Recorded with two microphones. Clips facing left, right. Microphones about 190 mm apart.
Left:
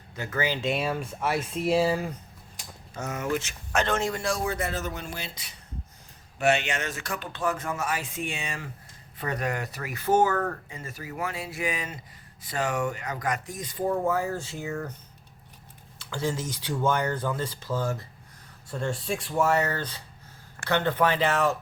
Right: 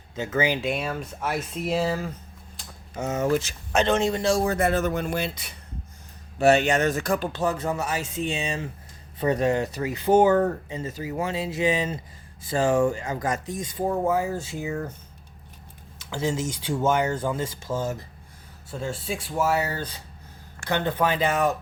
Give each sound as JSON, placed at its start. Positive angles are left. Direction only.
{"t": 0.2, "sound": "speech", "side_deg": -20}
{"t": 0.6, "sound": "speech", "side_deg": 5}
{"t": 1.6, "sound": "speech", "side_deg": 5}
{"t": 2.9, "sound": "speech", "side_deg": -20}
{"t": 3.2, "sound": "speech", "side_deg": -35}
{"t": 3.7, "sound": "speech", "side_deg": -20}
{"t": 4.4, "sound": "speech", "side_deg": -55}
{"t": 6.4, "sound": "speech", "side_deg": -40}
{"t": 8.3, "sound": "speech", "side_deg": -25}
{"t": 14.0, "sound": "speech", "side_deg": -15}
{"t": 16.0, "sound": "speech", "side_deg": -20}
{"t": 16.8, "sound": "speech", "side_deg": -10}
{"t": 18.7, "sound": "speech", "side_deg": -5}